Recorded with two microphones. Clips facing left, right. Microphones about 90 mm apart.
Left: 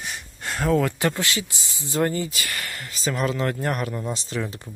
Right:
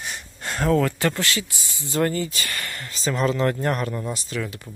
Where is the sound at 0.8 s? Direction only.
20° left (ahead or behind).